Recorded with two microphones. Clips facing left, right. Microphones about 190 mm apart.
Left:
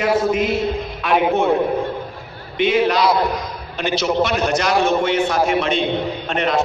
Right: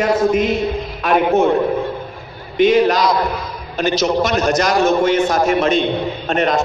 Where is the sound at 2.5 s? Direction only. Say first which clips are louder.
Right 4 dB; 40° right (ahead or behind).